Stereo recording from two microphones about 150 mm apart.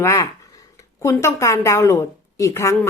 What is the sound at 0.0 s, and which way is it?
A woman's voice, 20° left (ahead or behind).